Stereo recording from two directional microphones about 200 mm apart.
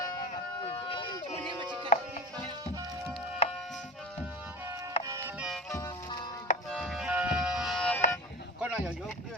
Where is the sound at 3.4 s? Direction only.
30° left (ahead or behind).